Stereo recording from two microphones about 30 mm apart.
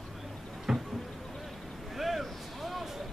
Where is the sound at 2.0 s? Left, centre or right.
Centre.